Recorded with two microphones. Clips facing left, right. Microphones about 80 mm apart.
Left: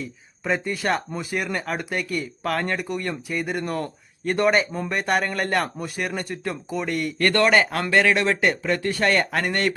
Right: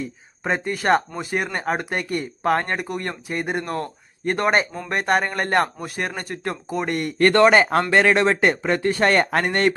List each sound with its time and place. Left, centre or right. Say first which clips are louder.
0.4 s speech: right 3 dB; right
6.8 s speech: right 1 dB; right
7.2 s speech: right 4 dB; right